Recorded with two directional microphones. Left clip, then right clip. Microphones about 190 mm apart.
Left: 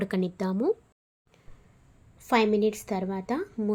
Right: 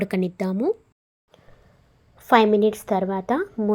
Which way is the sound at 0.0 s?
20° right (ahead or behind).